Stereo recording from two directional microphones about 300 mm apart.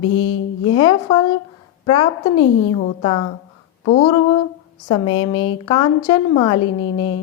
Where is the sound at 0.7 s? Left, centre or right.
Centre.